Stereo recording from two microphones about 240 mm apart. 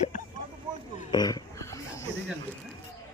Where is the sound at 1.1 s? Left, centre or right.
Centre.